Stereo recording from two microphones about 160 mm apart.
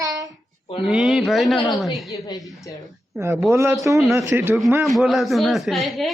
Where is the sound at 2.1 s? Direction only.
25° left (ahead or behind).